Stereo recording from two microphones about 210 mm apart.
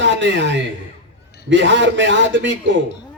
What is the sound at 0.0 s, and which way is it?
A woman's voice, 60° right (ahead or behind).